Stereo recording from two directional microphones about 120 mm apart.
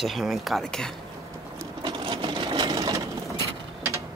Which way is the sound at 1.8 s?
45° right (ahead or behind).